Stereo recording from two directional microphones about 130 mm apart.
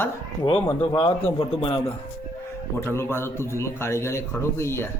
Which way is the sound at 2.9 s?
20° left (ahead or behind).